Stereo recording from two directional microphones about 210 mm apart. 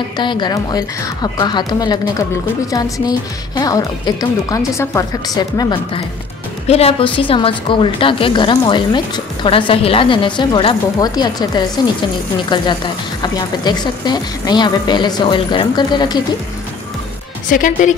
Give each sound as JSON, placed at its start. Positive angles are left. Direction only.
{"t": 0.2, "sound": "a woman's voice", "side_deg": 20}
{"t": 13.2, "sound": "a woman's voice", "side_deg": 20}
{"t": 17.5, "sound": "speech", "side_deg": 40}